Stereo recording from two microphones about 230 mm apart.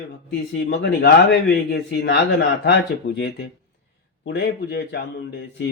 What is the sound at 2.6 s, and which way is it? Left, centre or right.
Speech, left.